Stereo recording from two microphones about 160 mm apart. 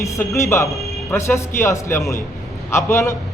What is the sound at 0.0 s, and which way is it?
Speech, 20° left (ahead or behind).